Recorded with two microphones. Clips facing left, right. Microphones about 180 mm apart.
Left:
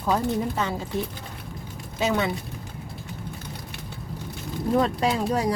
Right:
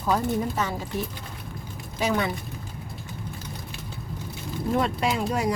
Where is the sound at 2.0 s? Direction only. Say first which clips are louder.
Left 1 dB; 25° left (ahead or behind).